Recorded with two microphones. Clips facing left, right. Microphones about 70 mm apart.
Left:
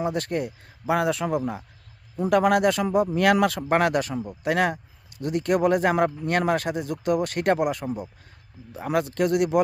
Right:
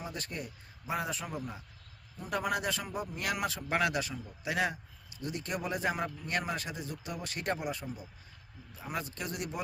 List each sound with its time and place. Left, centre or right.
0.0 s a man's voice: left
3.7 s speech: left